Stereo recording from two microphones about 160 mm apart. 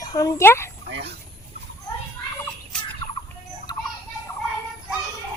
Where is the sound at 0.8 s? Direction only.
90° right.